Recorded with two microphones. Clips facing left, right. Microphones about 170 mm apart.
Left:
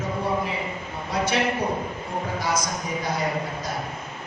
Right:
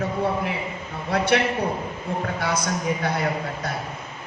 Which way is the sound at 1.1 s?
60° right (ahead or behind).